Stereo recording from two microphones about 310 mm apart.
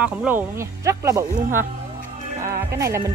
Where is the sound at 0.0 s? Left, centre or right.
Centre.